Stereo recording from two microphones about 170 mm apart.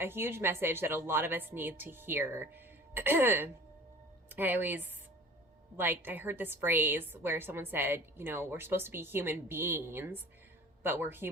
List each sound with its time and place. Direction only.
0.0 s a woman's voice: 15° right (ahead or behind)